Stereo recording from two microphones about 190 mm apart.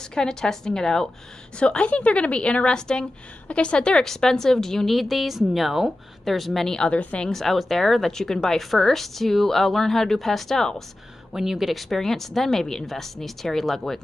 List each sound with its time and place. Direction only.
0.1 s a woman's voice: 5° left (ahead or behind)